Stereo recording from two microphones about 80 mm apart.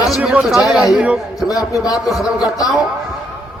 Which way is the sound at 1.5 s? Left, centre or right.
Left.